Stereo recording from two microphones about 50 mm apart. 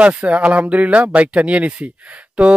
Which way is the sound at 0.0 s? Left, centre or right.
Right.